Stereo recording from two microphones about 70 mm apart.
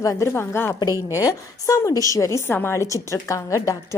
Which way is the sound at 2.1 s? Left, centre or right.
Left.